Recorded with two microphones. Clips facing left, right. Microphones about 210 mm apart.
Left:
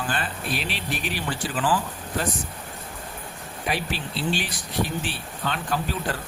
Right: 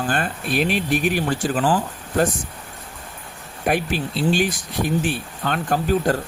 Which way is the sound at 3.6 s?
50° right (ahead or behind).